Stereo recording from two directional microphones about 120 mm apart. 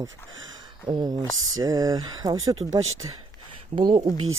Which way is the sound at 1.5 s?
30° right (ahead or behind).